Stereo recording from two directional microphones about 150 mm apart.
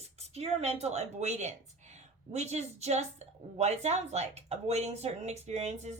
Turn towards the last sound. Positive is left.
turn(degrees=-50)  # may be behind; listen again after turning